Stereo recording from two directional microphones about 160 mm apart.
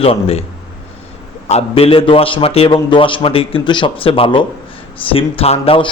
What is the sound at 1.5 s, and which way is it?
A man's voice, 35° left (ahead or behind).